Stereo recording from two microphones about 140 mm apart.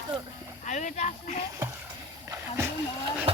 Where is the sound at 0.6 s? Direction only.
60° left (ahead or behind).